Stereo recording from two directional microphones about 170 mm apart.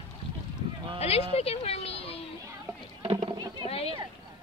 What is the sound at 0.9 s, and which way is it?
Speech, 35° left (ahead or behind).